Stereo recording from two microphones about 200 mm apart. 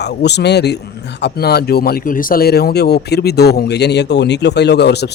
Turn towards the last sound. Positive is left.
turn(degrees=55)  # may be behind; listen again after turning